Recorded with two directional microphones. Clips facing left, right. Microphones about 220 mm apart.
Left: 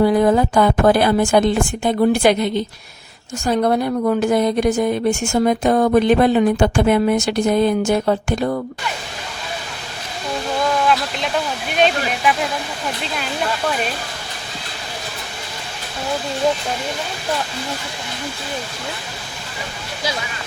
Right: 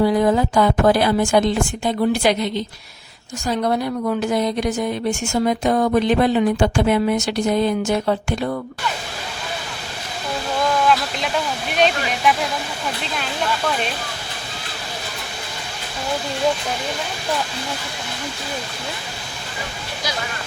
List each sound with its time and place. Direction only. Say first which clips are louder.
0.0 s a woman's voice: left 2 dB; 55° left (ahead or behind)
11.8 s speech: left 1 dB; centre (ahead or behind)